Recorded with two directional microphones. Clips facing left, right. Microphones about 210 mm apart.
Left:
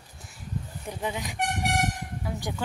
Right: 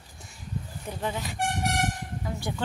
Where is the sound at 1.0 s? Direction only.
15° left (ahead or behind).